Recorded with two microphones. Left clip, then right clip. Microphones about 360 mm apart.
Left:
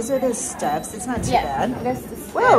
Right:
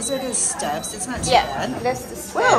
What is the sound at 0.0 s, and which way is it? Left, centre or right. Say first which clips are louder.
A woman's voice: left 3 dB; centre.